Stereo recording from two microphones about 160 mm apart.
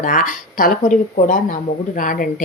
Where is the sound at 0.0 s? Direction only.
55° left (ahead or behind).